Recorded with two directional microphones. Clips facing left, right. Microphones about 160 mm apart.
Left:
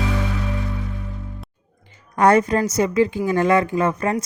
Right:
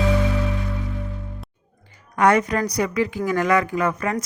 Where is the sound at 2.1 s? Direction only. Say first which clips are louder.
Left 2 dB; 35° left (ahead or behind).